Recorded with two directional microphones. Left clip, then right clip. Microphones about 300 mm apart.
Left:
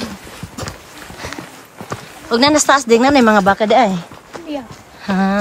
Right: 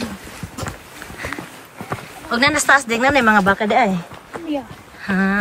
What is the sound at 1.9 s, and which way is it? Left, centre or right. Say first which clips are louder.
Speech: left 4 dB; centre.